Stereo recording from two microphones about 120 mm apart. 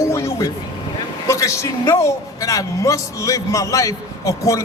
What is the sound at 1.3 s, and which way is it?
A man's voice, 25° left (ahead or behind).